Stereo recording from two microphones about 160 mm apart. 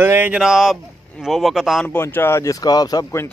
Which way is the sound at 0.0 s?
15° right (ahead or behind).